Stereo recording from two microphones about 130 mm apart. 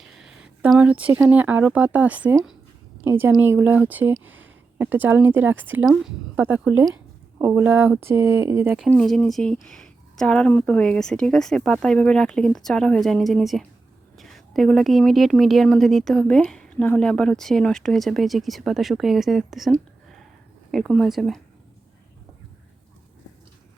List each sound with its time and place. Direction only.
0.0 s speech: 5° right (ahead or behind)
5.8 s a woman's voice: 5° right (ahead or behind)
6.3 s speech: 15° right (ahead or behind)
8.9 s a woman's voice: 5° left (ahead or behind)